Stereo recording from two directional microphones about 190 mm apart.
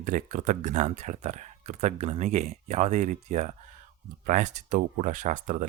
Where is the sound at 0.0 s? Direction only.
40° right (ahead or behind).